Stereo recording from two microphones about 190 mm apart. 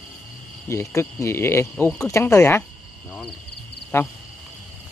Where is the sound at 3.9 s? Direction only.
10° left (ahead or behind).